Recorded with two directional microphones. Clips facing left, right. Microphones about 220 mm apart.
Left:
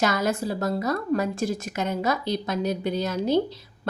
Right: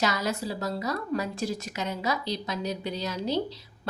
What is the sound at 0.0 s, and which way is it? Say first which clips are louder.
A woman's voice: left 4 dB; 50° left (ahead or behind).